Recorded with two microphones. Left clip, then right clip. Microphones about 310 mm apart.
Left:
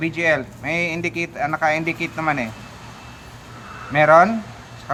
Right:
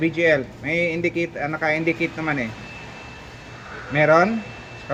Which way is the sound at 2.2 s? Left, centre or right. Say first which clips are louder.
Left 3 dB; left.